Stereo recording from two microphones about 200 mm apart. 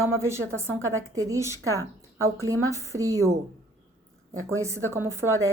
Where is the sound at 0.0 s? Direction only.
15° right (ahead or behind).